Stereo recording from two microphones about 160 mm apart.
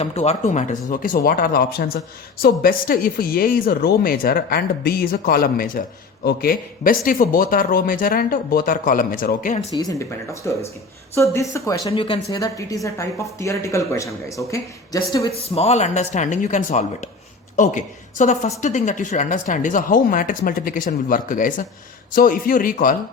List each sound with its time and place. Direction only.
0.0 s speech: 40° left (ahead or behind); by 9.6 s 60° left (ahead or behind)
9.7 s a woman's voice: 25° left (ahead or behind)
11.9 s a woman's voice: 35° left (ahead or behind)
15.5 s speech: 40° left (ahead or behind); by 23.0 s 60° left (ahead or behind)